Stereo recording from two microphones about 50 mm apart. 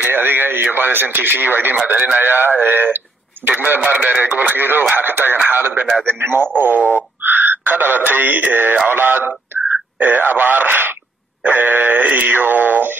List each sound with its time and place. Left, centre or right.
0.0 s speech: right
3.4 s wail: right
3.8 s speech: right
4.3 s wail: right
4.9 s speech: right
5.5 s wail: right
6.0 s speech: right
11.4 s wail: right